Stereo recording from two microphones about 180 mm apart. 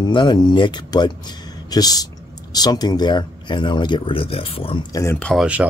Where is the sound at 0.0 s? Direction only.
25° left (ahead or behind).